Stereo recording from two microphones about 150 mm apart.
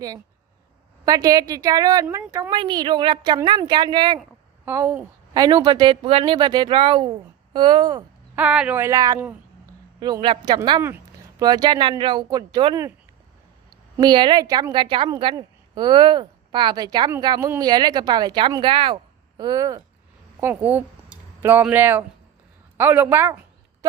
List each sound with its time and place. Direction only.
1.0 s speech: 25° right (ahead or behind)
2.0 s speech: 15° right (ahead or behind)
2.5 s speech: 30° right (ahead or behind)
4.7 s a woman's voice: 20° right (ahead or behind)
8.4 s speech: 10° right (ahead or behind); by 12.9 s 25° right (ahead or behind)
14.0 s a woman's voice: 30° right (ahead or behind)
20.4 s speech: 10° right (ahead or behind)